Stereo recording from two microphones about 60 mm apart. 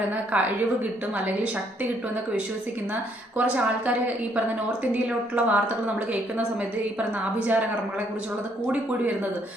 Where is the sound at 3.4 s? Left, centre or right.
Right.